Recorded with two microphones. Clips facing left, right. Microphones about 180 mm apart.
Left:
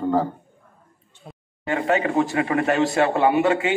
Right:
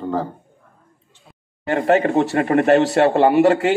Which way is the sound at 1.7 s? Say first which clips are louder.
Right 5 dB; 45° right (ahead or behind).